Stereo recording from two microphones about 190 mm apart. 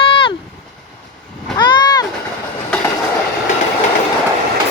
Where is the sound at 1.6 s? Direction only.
25° left (ahead or behind).